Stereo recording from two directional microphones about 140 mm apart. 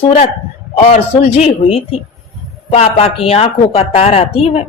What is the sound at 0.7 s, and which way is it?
Speech, 55° left (ahead or behind).